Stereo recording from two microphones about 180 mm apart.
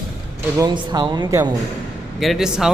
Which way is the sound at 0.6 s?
25° right (ahead or behind).